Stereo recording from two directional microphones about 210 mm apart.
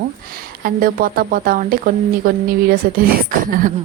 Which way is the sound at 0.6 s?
45° right (ahead or behind).